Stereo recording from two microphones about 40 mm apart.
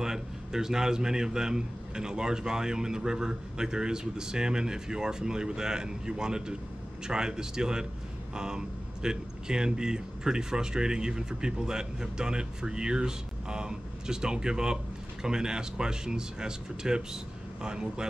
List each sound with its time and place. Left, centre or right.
0.0 s a man's voice: centre